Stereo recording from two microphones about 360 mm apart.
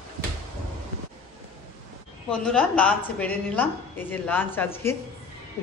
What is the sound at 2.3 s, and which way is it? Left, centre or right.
A woman's voice, centre.